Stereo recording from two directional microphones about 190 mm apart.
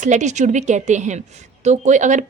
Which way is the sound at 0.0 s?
40° right (ahead or behind).